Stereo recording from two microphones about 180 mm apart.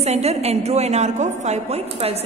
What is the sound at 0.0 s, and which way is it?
A woman's voice, 35° right (ahead or behind).